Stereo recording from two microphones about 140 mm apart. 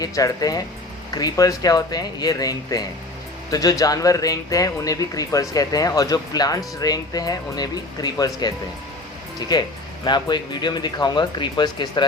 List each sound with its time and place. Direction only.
0.0 s speech: 25° left (ahead or behind)